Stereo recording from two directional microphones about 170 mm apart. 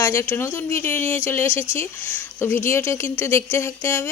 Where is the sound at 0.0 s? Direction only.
15° left (ahead or behind).